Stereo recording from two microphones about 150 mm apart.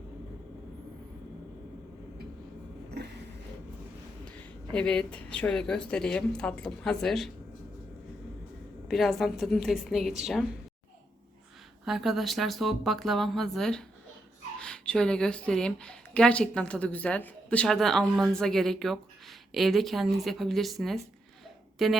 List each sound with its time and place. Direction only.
3.0 s a sound: 90° right
4.3 s speech: 5° left (ahead or behind)
8.9 s speech: centre (ahead or behind)
11.9 s speech: centre (ahead or behind)